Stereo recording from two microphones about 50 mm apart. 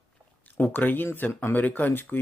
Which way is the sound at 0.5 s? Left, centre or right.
Left.